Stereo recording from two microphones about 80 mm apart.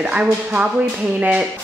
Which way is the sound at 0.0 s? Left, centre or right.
Centre.